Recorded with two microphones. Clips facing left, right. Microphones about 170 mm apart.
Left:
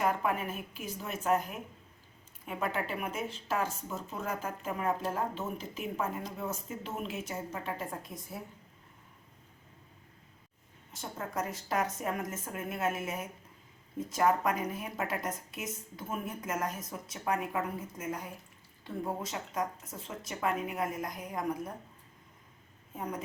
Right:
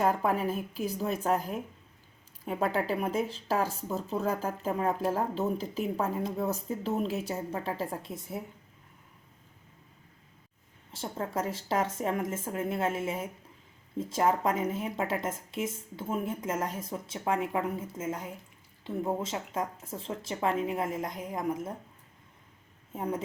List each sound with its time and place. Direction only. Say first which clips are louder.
0.0 s speech: right 4 dB; 35° right (ahead or behind)
10.9 s a woman's voice: right 4 dB; 30° right (ahead or behind)
23.0 s a woman's voice: right 5 dB; 25° right (ahead or behind)